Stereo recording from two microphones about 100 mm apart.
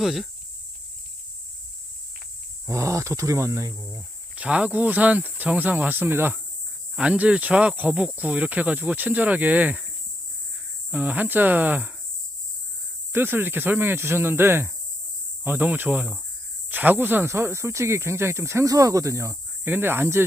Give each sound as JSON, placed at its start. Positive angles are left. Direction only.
{"t": 0.0, "sound": "speech", "side_deg": -5}
{"t": 2.6, "sound": "speech", "side_deg": -30}
{"t": 4.4, "sound": "speech", "side_deg": -10}
{"t": 10.9, "sound": "speech", "side_deg": -15}
{"t": 13.1, "sound": "speech", "side_deg": -20}
{"t": 19.6, "sound": "speech", "side_deg": -20}